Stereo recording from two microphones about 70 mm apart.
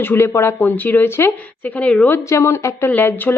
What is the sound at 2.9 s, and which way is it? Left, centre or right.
Speech, left.